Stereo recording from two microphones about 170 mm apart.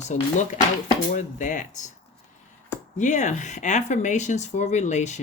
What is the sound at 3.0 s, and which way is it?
Speech, 45° left (ahead or behind).